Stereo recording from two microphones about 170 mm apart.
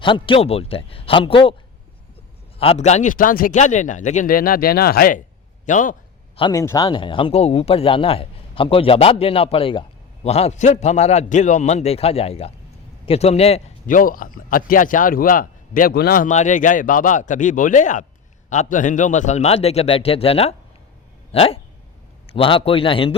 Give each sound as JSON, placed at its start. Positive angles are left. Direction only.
{"t": 0.0, "sound": "a man's voice", "side_deg": 30}
{"t": 2.6, "sound": "speech", "side_deg": 40}
{"t": 6.3, "sound": "a man's voice", "side_deg": 25}
{"t": 13.8, "sound": "a man's voice", "side_deg": 55}